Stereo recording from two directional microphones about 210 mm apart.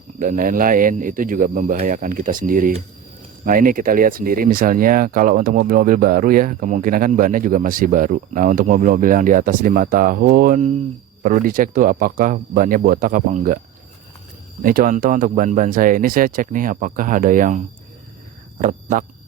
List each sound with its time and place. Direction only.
0.2 s speech: 40° right (ahead or behind)
14.6 s speech: 40° right (ahead or behind)
18.6 s speech: 40° right (ahead or behind)